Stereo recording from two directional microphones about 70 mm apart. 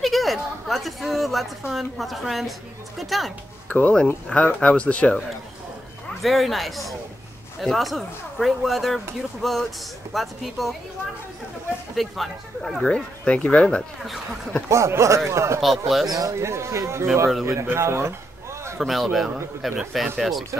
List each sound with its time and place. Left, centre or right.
0.0 s chatter: centre
1.7 s speech: centre
3.6 s speech: left
6.2 s speech: centre
11.9 s speech: centre
12.8 s speech: centre
14.7 s speech: right
15.6 s speech: centre
16.1 s a man's voice: right
18.8 s speech: centre